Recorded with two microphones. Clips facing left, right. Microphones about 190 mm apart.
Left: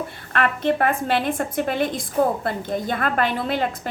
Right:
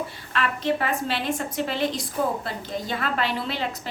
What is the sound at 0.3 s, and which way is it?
A woman's voice, 55° left (ahead or behind).